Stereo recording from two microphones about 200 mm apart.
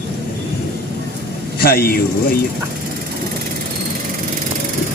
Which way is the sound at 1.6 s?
50° left (ahead or behind).